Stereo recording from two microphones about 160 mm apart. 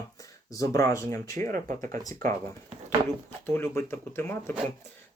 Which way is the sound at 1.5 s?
55° right (ahead or behind).